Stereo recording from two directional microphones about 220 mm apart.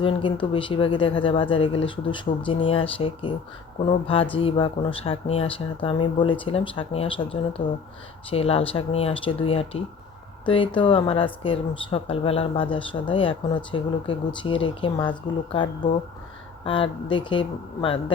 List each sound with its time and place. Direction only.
0.0 s speech: 25° left (ahead or behind)